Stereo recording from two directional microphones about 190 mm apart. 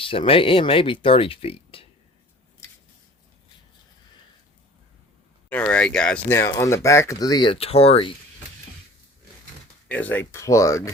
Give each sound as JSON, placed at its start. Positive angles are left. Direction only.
{"t": 0.0, "sound": "speech", "side_deg": 30}
{"t": 5.5, "sound": "speech", "side_deg": 5}
{"t": 9.9, "sound": "speech", "side_deg": 10}